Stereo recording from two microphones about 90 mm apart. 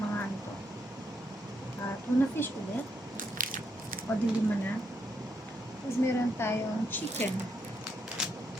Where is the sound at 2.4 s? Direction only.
25° left (ahead or behind).